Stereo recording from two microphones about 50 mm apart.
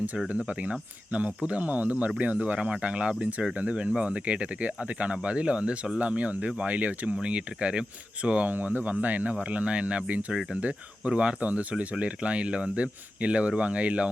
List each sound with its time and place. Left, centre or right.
0.3 s speech: right
8.4 s speech: right